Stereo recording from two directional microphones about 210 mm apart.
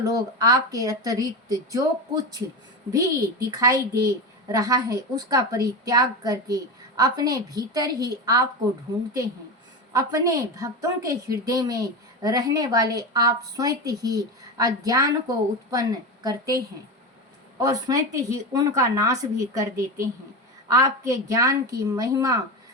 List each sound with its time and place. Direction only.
0.0 s a woman's voice: 15° right (ahead or behind)
9.9 s a woman's voice: 15° right (ahead or behind)
20.7 s a woman's voice: 15° right (ahead or behind)